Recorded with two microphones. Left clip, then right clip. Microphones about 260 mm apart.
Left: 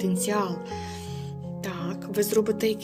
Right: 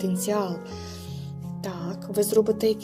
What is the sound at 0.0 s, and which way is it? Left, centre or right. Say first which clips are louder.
Speech: even; centre.